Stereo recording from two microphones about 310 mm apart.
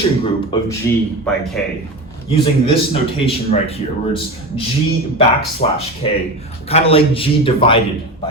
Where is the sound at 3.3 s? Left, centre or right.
Centre.